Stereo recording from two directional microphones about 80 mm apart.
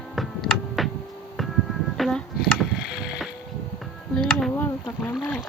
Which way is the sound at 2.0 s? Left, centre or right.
Centre.